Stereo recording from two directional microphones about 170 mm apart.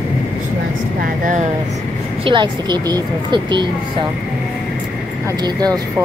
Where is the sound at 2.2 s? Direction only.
30° right (ahead or behind).